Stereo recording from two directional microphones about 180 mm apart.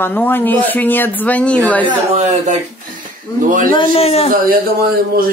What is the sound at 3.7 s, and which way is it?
Speech, 30° left (ahead or behind).